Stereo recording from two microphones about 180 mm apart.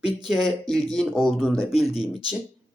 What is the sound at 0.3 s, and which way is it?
Speech, centre (ahead or behind).